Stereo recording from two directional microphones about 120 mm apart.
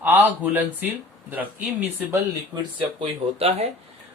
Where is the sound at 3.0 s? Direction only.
60° right (ahead or behind).